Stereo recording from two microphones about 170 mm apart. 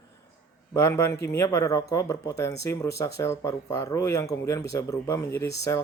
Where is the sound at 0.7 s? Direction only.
15° left (ahead or behind).